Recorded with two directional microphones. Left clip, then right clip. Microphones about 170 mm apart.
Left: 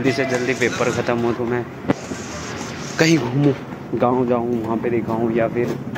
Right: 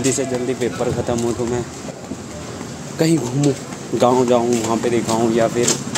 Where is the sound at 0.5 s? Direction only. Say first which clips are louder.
Left 2 dB; 15° right (ahead or behind).